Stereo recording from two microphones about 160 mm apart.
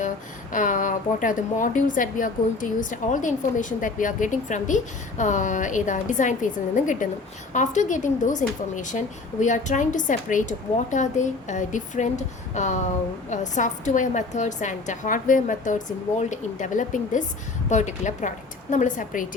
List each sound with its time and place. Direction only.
0.5 s a woman's voice: 55° left (ahead or behind)